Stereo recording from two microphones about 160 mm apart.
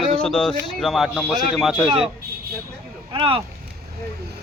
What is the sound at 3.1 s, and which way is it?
Speech, 35° right (ahead or behind).